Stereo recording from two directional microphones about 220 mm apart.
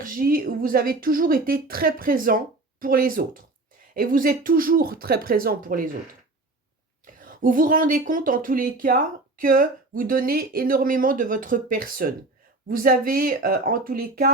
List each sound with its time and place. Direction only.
0.0 s speech: 40° right (ahead or behind)
7.2 s speech: 40° right (ahead or behind)